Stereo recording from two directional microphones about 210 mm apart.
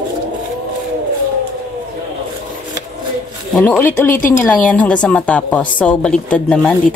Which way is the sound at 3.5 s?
5° left (ahead or behind).